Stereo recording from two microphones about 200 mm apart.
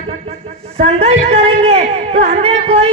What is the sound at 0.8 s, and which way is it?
A man's voice, 30° right (ahead or behind).